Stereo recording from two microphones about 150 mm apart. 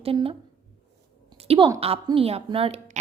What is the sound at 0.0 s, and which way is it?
Speech, 40° right (ahead or behind).